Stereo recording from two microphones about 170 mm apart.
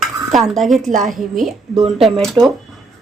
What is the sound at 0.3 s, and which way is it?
Speech, centre (ahead or behind).